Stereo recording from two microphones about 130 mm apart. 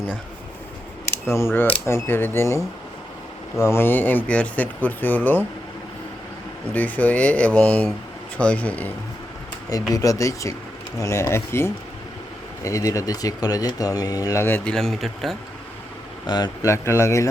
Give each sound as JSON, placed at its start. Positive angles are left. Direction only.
{"t": 1.0, "sound": "speech", "side_deg": 20}
{"t": 6.7, "sound": "speech", "side_deg": 10}
{"t": 9.9, "sound": "speech", "side_deg": 25}
{"t": 16.2, "sound": "speech", "side_deg": 30}
{"t": 16.7, "sound": "speech", "side_deg": 20}